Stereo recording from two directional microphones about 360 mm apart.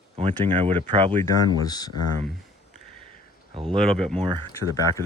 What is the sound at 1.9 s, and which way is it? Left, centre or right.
Speech, left.